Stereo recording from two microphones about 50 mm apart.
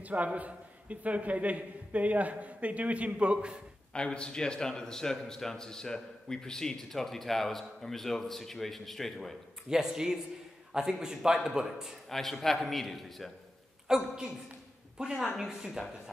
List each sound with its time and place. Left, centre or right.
0.0 s a man's voice: right
3.9 s a man's voice: centre
9.7 s a man's voice: centre
12.1 s a man's voice: centre
13.8 s a man's voice: centre